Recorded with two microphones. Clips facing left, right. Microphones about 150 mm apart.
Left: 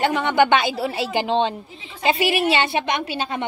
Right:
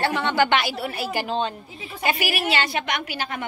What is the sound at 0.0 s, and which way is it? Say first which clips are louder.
A woman's voice: left 3 dB; 15° left (ahead or behind).